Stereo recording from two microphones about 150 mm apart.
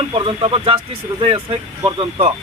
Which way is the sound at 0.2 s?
35° right (ahead or behind).